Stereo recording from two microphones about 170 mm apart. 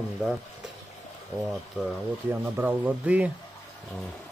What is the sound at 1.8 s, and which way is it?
Speech, 5° right (ahead or behind).